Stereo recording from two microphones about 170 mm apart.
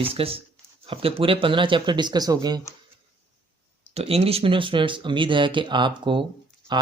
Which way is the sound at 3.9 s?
35° right (ahead or behind).